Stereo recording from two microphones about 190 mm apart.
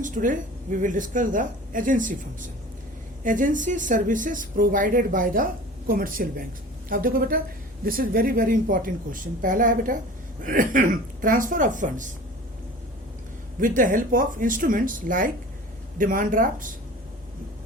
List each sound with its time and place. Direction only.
0.0 s speech: 45° right (ahead or behind)
3.2 s speech: 45° right (ahead or behind)
13.6 s speech: 45° right (ahead or behind)